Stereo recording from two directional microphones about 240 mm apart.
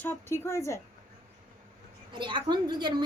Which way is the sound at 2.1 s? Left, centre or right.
Centre.